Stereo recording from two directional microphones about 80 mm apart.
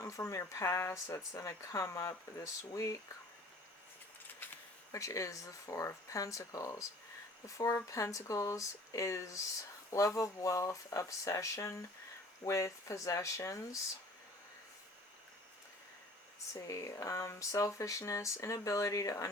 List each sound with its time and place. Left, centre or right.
0.0 s speech: left
4.9 s speech: left
16.6 s speech: left